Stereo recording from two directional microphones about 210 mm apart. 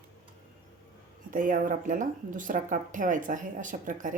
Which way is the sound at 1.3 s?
40° right (ahead or behind).